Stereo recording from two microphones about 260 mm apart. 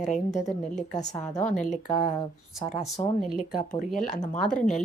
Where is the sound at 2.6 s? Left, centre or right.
Left.